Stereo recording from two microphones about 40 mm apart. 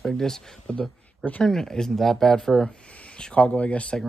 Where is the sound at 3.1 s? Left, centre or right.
Left.